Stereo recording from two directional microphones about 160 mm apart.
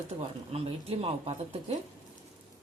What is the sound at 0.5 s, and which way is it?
Speech, 40° right (ahead or behind).